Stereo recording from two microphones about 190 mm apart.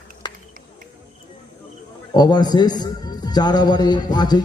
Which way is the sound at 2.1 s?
20° left (ahead or behind).